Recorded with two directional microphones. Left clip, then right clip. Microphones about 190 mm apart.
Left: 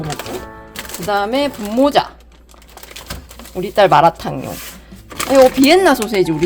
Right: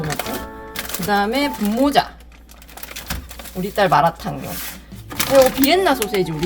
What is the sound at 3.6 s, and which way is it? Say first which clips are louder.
Speech: left 5 dB; 55° left (ahead or behind).